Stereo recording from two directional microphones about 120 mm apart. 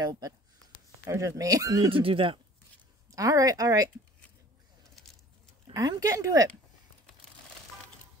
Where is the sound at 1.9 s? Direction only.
50° right (ahead or behind).